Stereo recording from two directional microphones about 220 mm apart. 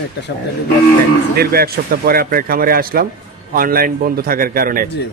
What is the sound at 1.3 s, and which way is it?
Speech, 45° right (ahead or behind).